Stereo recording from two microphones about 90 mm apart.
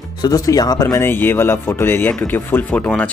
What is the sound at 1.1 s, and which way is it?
Speech, 25° left (ahead or behind).